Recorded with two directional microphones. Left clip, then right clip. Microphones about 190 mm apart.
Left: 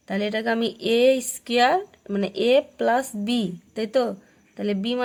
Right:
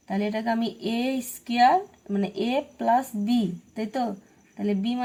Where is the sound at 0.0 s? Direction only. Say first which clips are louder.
Left 3 dB; 35° left (ahead or behind).